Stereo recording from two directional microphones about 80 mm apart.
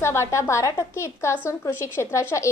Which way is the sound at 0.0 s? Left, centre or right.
Left.